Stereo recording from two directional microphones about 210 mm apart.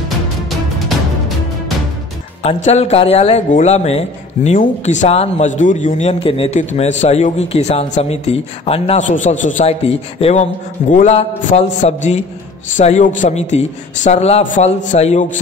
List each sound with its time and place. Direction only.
2.4 s speech: 30° left (ahead or behind)